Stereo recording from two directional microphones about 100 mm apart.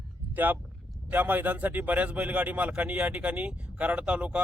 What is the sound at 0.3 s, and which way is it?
A man's voice, 20° right (ahead or behind).